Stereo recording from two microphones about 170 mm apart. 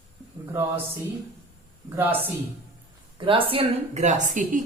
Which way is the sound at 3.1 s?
30° right (ahead or behind).